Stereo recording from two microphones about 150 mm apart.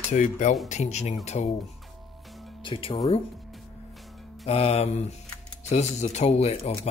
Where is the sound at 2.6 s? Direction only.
35° left (ahead or behind).